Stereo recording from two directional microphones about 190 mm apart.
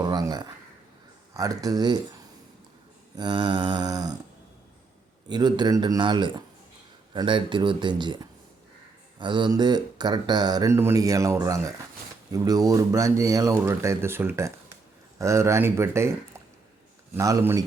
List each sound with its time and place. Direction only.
0.0 s a sound: 20° right (ahead or behind)
1.3 s speech: 20° right (ahead or behind)
3.2 s speech: 25° right (ahead or behind)
5.3 s speech: 20° right (ahead or behind)
17.2 s speech: 15° right (ahead or behind)